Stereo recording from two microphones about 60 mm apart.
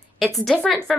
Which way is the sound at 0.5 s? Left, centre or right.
Centre.